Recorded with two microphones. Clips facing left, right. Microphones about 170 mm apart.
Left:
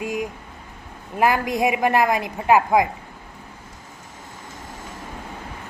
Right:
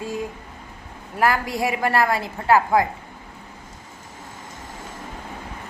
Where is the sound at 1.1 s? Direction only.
20° left (ahead or behind).